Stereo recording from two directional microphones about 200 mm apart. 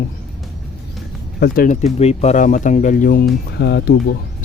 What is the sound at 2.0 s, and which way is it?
Speech, 30° left (ahead or behind).